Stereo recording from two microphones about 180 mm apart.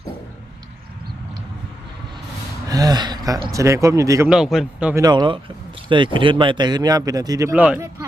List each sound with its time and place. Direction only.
2.6 s speech: 20° right (ahead or behind)
4.3 s speech: centre (ahead or behind)
5.0 s speech: 25° right (ahead or behind); by 7.9 s 5° right (ahead or behind)